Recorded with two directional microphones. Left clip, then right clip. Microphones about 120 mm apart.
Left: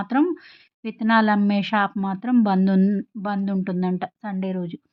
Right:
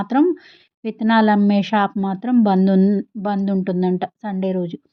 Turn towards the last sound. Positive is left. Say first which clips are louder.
# right 7 dB
turn(degrees=-30)  # may be behind; listen again after turning